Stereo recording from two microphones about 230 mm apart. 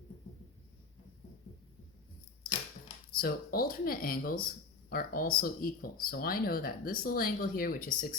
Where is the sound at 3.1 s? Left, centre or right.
Left.